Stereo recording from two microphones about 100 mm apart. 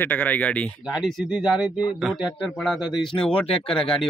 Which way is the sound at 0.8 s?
Centre (ahead or behind).